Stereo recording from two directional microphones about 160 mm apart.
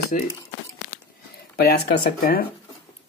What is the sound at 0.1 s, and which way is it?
Speech, 55° left (ahead or behind).